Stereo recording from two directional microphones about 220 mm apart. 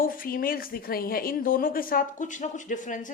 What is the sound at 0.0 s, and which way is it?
A woman's voice, 40° left (ahead or behind).